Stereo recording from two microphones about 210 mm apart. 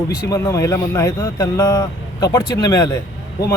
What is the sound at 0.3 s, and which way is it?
Speech, 15° left (ahead or behind).